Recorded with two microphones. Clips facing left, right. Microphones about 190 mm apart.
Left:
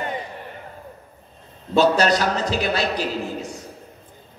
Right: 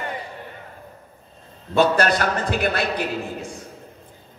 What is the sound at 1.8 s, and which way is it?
A man's voice, 55° right (ahead or behind).